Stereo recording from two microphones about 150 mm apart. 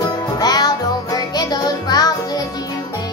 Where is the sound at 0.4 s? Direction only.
25° left (ahead or behind).